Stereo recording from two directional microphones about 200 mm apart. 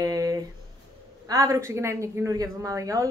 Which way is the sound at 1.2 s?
15° right (ahead or behind).